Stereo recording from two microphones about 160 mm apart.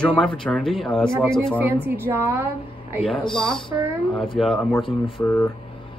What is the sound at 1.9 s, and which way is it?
Speech, 15° right (ahead or behind).